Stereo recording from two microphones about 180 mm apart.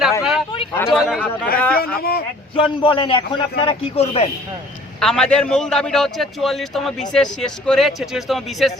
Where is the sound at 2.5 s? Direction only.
30° left (ahead or behind).